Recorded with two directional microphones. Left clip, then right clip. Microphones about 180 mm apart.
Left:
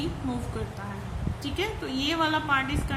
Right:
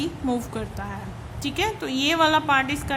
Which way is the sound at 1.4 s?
50° right (ahead or behind).